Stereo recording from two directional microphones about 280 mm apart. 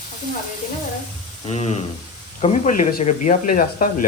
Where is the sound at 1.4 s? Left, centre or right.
Left.